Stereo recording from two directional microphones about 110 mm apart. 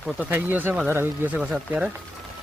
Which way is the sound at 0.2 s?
15° right (ahead or behind).